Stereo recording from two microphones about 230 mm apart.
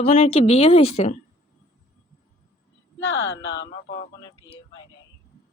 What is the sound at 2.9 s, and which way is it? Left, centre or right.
Speech, left.